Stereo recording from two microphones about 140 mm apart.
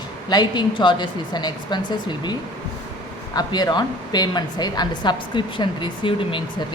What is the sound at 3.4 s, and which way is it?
A woman's voice, 30° left (ahead or behind).